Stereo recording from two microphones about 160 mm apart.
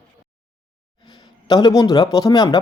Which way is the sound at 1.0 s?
25° left (ahead or behind).